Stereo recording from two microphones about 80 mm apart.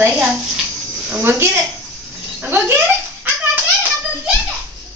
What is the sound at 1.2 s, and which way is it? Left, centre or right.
Speech, right.